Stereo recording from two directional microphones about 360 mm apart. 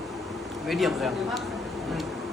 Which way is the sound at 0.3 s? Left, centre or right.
Centre.